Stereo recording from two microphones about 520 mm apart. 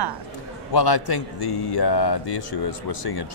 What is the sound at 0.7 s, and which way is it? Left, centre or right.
Speech, left.